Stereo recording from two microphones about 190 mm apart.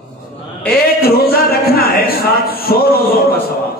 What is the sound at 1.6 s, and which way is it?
A man's voice, 50° left (ahead or behind).